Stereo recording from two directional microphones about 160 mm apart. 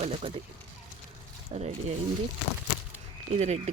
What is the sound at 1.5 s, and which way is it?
Speech, 45° right (ahead or behind).